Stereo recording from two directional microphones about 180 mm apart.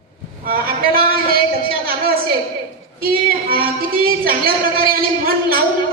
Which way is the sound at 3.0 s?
55° right (ahead or behind).